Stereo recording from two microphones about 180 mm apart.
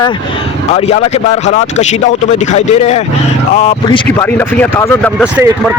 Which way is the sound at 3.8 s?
20° left (ahead or behind).